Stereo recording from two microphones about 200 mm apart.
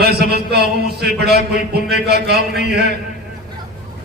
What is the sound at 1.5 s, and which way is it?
A man's voice, 55° right (ahead or behind).